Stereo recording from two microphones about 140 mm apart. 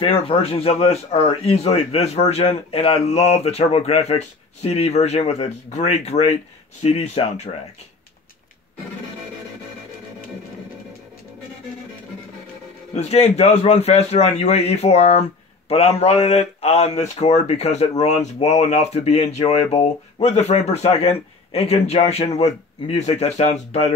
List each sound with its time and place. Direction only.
0.0 s speech: 45° left (ahead or behind)
12.9 s speech: 50° left (ahead or behind)